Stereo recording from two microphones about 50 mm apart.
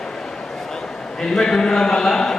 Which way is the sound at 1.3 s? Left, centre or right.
Centre.